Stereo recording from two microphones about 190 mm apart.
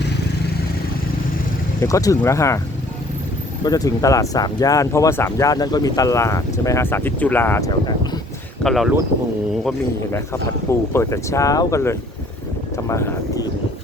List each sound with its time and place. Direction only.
1.8 s speech: 15° left (ahead or behind)
3.6 s speech: 20° left (ahead or behind)
7.7 s speech: 20° left (ahead or behind)
8.6 s speech: centre (ahead or behind)
10.7 s speech: 15° left (ahead or behind)
12.7 s vehicle: 15° left (ahead or behind)